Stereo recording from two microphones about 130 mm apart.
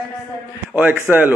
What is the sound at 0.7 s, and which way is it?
Speech, 15° right (ahead or behind).